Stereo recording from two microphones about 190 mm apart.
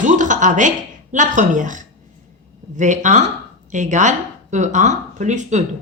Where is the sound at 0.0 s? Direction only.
40° right (ahead or behind).